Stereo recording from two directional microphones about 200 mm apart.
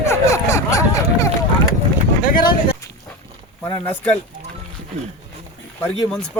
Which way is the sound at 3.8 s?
5° left (ahead or behind).